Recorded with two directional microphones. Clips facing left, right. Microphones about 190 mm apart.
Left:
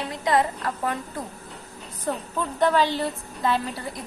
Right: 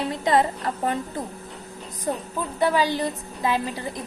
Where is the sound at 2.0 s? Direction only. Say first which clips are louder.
Even; 10° right (ahead or behind).